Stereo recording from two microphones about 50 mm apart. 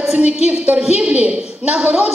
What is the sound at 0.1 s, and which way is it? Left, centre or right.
A woman's voice, right.